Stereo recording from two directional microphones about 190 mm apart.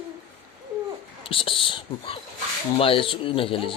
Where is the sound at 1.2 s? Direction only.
30° left (ahead or behind).